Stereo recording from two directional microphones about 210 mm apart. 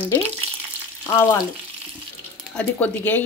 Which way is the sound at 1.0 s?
15° left (ahead or behind).